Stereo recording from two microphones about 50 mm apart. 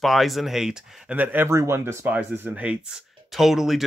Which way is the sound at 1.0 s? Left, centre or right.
Right.